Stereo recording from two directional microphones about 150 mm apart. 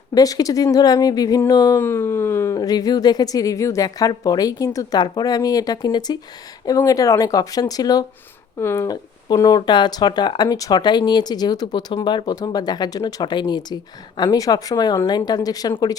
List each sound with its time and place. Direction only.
0.1 s speech: 25° left (ahead or behind)
1.8 s speech: 15° left (ahead or behind)